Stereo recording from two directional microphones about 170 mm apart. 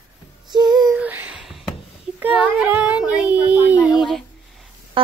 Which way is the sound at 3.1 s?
10° right (ahead or behind).